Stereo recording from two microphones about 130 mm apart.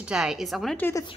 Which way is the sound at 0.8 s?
15° left (ahead or behind).